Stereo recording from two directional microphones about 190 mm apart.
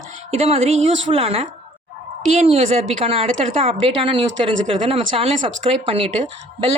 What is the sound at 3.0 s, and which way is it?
Speech, 30° right (ahead or behind).